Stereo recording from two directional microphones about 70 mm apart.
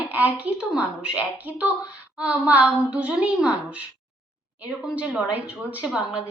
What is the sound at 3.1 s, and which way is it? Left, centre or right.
Speech, centre.